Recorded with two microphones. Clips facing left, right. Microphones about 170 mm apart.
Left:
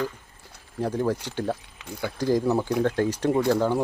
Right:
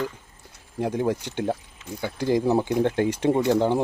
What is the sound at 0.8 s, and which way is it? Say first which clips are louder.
Speech: right 1 dB; 15° right (ahead or behind).